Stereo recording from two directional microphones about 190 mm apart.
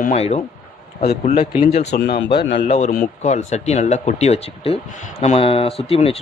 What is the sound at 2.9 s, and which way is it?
Speech, 45° left (ahead or behind).